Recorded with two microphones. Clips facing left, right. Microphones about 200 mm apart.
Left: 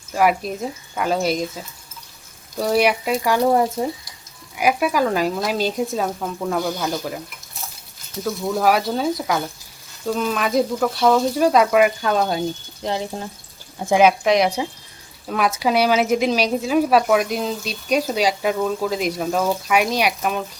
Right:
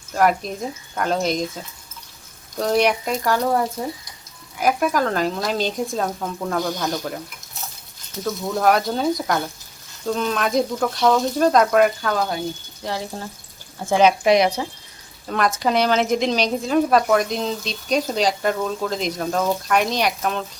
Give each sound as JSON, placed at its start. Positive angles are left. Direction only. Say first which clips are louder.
{"t": 0.1, "sound": "a woman's voice", "louder": "left 1 dB", "side_deg": 5}
{"t": 8.2, "sound": "speech", "louder": "left 1 dB", "side_deg": 5}
{"t": 12.0, "sound": "a woman's voice", "louder": "left 3 dB", "side_deg": 20}
{"t": 14.3, "sound": "a woman's voice", "louder": "right 1 dB", "side_deg": 0}